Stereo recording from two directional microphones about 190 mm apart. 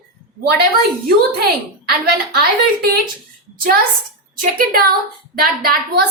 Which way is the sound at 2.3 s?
55° right (ahead or behind).